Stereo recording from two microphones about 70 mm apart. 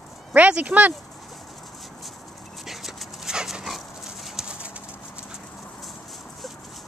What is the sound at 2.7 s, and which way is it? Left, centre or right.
Dog, centre.